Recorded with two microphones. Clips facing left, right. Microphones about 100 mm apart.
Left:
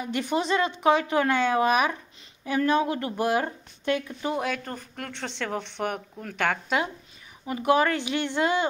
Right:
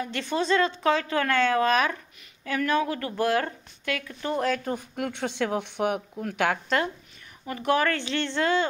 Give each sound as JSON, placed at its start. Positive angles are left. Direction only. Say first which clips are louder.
{"t": 0.0, "sound": "a woman's voice", "louder": "left 1 dB", "side_deg": 15}
{"t": 4.3, "sound": "speech", "louder": "right 2 dB", "side_deg": 5}
{"t": 4.6, "sound": "speech", "louder": "right 6 dB", "side_deg": -15}
{"t": 7.4, "sound": "a woman's voice", "louder": "left 2 dB", "side_deg": 15}